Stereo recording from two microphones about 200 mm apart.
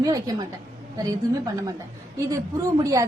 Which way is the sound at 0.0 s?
20° right (ahead or behind).